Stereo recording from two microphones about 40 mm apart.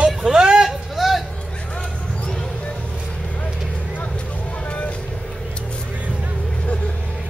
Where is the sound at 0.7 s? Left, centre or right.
Centre.